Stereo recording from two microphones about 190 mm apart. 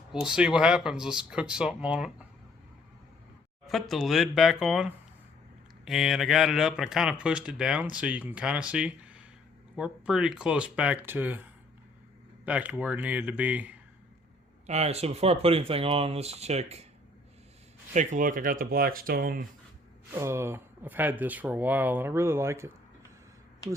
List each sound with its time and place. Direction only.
0.1 s speech: 5° right (ahead or behind)
3.7 s speech: centre (ahead or behind)
12.5 s speech: 10° right (ahead or behind)
14.7 s speech: 35° right (ahead or behind)
17.9 s speech: 40° right (ahead or behind)
20.1 s speech: 15° right (ahead or behind)